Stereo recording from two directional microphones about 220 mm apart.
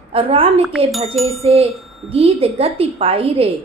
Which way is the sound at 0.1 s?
25° right (ahead or behind).